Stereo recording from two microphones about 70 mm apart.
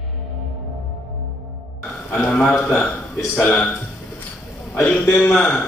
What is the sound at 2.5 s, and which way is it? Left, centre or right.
A man's voice, left.